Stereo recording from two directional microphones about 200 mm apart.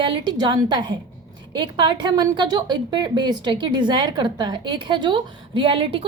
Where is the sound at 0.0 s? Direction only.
25° right (ahead or behind).